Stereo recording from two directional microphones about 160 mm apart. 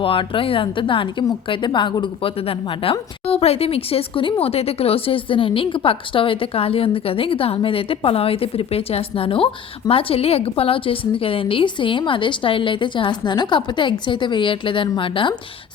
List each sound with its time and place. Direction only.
0.0 s a woman's voice: 35° left (ahead or behind)